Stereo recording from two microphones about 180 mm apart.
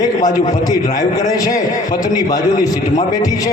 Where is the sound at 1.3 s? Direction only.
20° left (ahead or behind).